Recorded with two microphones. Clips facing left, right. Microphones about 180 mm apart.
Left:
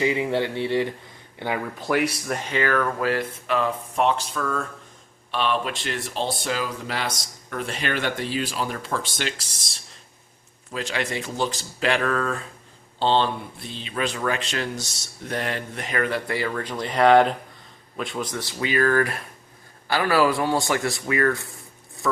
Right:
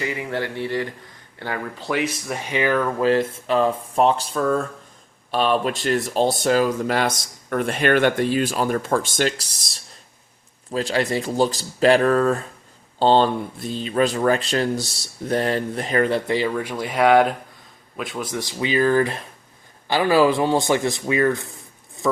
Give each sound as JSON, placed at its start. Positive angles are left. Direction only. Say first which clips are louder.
{"t": 0.0, "sound": "speech", "louder": "left 4 dB", "side_deg": 20}
{"t": 2.2, "sound": "speech", "louder": "right 2 dB", "side_deg": -10}
{"t": 16.5, "sound": "speech", "louder": "right 3 dB", "side_deg": -10}